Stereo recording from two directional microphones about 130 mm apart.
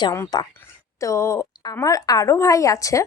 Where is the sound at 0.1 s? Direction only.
25° left (ahead or behind).